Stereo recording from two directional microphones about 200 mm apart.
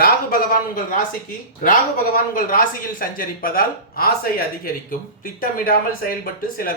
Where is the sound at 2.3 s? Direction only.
45° left (ahead or behind).